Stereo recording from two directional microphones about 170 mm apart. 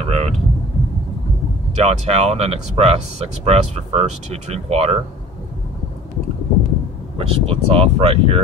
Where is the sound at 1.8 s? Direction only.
35° right (ahead or behind).